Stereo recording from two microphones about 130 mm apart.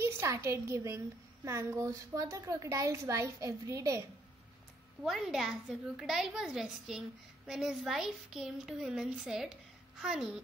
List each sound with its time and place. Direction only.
0.0 s a child's voice: 20° right (ahead or behind)
5.0 s a woman's voice: centre (ahead or behind)